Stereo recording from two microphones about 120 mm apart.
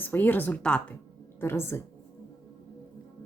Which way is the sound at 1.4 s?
20° left (ahead or behind).